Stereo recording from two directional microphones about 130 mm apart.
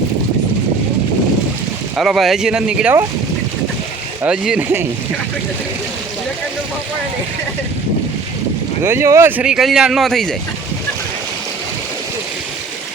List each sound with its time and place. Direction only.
2.0 s speech: centre (ahead or behind)
4.3 s speech: 5° right (ahead or behind)
8.8 s speech: 20° right (ahead or behind)
9.4 s speech: 5° right (ahead or behind)